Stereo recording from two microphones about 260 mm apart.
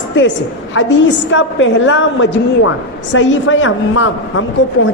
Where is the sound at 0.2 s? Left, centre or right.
Left.